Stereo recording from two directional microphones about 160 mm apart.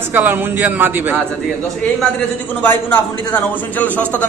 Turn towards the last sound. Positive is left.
turn(degrees=10)  # may be behind; listen again after turning